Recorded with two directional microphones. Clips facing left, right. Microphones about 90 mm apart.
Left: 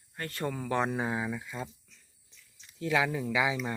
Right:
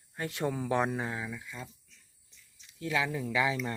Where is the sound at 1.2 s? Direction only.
20° left (ahead or behind).